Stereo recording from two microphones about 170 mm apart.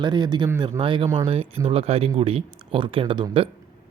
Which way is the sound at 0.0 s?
25° right (ahead or behind).